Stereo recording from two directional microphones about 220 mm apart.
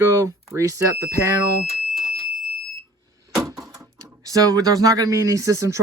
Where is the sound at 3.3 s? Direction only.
15° right (ahead or behind).